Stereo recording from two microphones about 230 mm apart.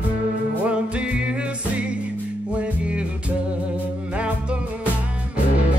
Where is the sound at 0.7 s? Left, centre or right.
Centre.